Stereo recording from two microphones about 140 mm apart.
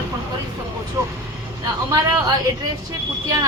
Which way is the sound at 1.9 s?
30° right (ahead or behind).